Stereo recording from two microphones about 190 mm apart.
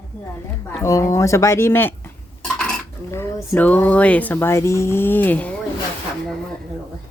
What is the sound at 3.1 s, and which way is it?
Speech, 15° left (ahead or behind).